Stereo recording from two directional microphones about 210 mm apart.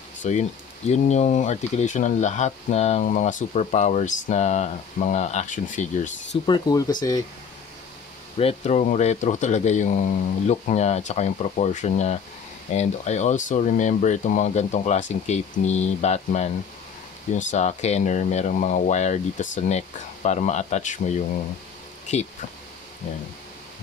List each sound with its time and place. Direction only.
0.2 s speech: 35° left (ahead or behind)
6.4 s speech: 20° left (ahead or behind)
8.4 s speech: 30° left (ahead or behind)
22.1 s speech: 35° left (ahead or behind)